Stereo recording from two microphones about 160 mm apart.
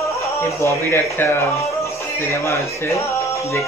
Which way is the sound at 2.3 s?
15° left (ahead or behind).